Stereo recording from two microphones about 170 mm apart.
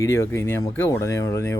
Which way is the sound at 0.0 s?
15° left (ahead or behind).